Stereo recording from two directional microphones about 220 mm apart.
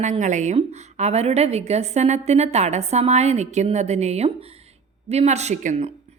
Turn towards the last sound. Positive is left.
turn(degrees=-30)  # may be behind; listen again after turning